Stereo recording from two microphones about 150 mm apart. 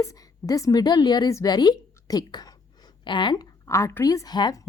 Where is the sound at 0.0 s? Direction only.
20° left (ahead or behind).